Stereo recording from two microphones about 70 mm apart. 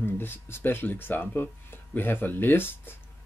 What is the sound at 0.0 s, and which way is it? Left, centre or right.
Speech, left.